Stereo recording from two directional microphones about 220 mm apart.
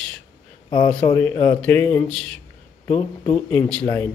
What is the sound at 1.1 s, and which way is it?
A man's voice, 10° left (ahead or behind).